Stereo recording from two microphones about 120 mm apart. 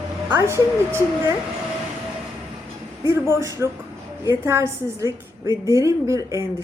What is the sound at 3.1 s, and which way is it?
A woman's voice, 25° right (ahead or behind).